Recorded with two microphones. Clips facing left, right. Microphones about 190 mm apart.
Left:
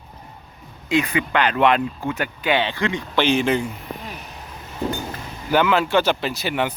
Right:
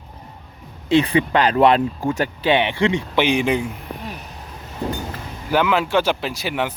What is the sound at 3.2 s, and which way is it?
Speech, 15° right (ahead or behind).